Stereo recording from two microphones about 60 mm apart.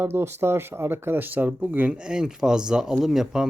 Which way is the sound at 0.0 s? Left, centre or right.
Right.